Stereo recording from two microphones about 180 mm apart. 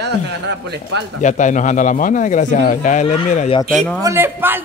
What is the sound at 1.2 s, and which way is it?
Speech, 45° left (ahead or behind).